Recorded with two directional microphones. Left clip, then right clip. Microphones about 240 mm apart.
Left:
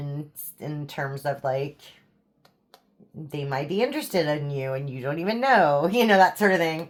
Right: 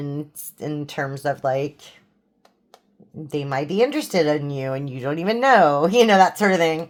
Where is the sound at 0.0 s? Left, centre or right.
Right.